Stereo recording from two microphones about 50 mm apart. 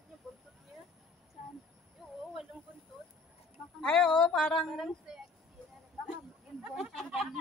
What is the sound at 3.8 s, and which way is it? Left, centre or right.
Speech, centre.